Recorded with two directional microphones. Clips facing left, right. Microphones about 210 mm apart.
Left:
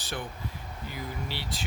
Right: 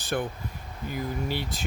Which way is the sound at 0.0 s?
50° right (ahead or behind).